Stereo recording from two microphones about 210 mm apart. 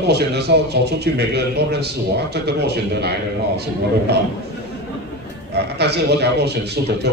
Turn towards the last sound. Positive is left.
turn(degrees=-50)  # may be behind; listen again after turning